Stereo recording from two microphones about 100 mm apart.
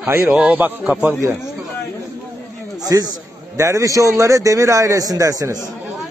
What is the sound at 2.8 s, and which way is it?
Speech, 40° right (ahead or behind).